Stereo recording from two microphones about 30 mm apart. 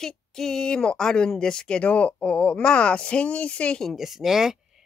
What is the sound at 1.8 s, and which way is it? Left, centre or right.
Speech, left.